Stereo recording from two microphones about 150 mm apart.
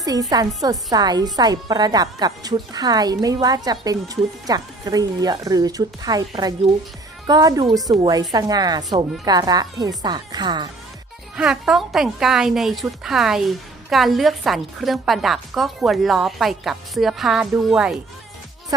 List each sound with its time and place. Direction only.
0.0 s a woman's voice: 25° right (ahead or behind)
7.3 s a woman's voice: 25° right (ahead or behind)
11.3 s a woman's voice: 5° right (ahead or behind)